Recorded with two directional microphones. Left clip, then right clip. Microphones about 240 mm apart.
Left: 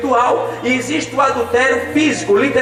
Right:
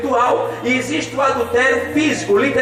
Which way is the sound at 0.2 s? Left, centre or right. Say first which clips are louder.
Left 1 dB; centre.